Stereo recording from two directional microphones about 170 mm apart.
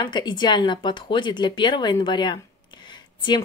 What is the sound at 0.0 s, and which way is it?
Speech, 25° left (ahead or behind).